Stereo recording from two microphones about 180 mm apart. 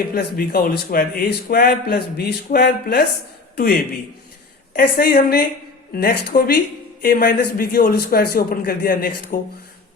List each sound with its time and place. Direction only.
0.1 s a man's voice: 55° left (ahead or behind)